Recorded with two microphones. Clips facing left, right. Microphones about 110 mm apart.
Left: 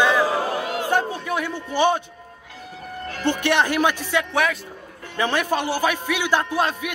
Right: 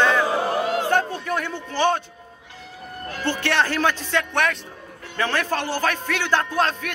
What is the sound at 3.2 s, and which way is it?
Speech, 15° left (ahead or behind).